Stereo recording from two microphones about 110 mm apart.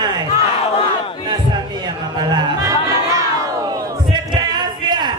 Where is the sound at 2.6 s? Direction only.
30° right (ahead or behind).